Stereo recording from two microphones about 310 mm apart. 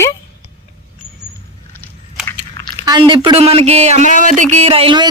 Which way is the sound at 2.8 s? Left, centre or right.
Centre.